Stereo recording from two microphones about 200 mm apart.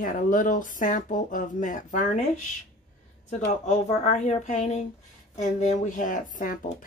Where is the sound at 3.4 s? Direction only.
35° left (ahead or behind).